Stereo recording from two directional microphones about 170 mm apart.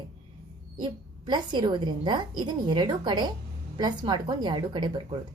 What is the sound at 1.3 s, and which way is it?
A woman's voice, 25° right (ahead or behind).